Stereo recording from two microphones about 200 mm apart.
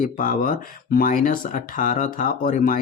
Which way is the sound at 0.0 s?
40° left (ahead or behind).